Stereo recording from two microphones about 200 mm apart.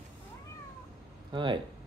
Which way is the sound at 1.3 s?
25° right (ahead or behind).